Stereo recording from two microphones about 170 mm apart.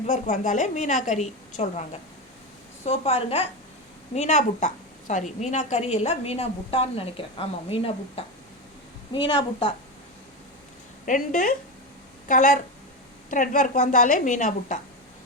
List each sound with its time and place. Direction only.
0.0 s a woman's voice: 45° left (ahead or behind); by 9.7 s 30° left (ahead or behind)
11.0 s a woman's voice: 50° left (ahead or behind)